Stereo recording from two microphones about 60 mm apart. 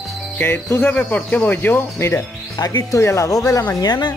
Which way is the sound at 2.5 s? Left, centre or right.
Left.